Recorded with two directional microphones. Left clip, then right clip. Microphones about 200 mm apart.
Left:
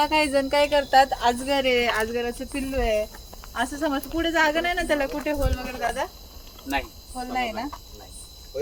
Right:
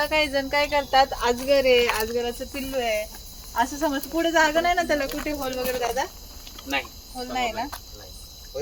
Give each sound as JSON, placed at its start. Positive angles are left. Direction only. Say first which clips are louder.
{"t": 0.0, "sound": "speech", "louder": "left 2 dB", "side_deg": 65}
{"t": 3.5, "sound": "speech", "louder": "right 2 dB", "side_deg": 25}
{"t": 7.3, "sound": "speech", "louder": "right 1 dB", "side_deg": 35}